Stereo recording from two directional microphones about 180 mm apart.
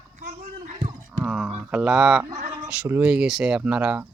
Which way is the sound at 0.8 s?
30° right (ahead or behind).